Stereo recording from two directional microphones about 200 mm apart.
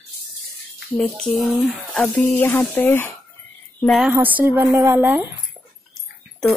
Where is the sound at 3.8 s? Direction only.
Centre (ahead or behind).